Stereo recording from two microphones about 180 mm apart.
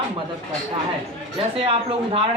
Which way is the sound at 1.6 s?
30° right (ahead or behind).